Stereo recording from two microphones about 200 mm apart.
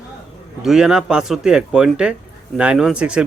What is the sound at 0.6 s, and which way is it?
A man's voice, centre (ahead or behind).